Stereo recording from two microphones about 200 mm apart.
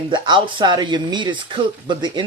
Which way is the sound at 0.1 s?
25° right (ahead or behind).